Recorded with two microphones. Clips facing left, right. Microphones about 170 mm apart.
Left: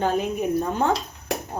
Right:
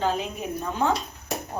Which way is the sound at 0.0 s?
60° left (ahead or behind).